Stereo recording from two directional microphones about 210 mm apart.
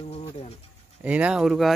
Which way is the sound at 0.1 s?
30° left (ahead or behind).